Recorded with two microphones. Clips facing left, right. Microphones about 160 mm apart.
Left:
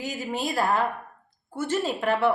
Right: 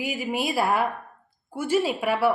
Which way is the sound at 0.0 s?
10° right (ahead or behind).